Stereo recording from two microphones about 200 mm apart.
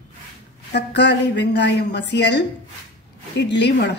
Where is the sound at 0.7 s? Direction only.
55° left (ahead or behind).